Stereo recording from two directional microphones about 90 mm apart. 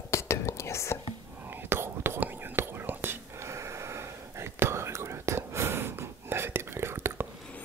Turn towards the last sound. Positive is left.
turn(degrees=-25)  # may be behind; listen again after turning